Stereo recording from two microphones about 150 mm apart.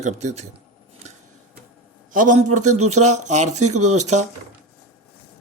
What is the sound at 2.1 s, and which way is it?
Speech, 60° right (ahead or behind).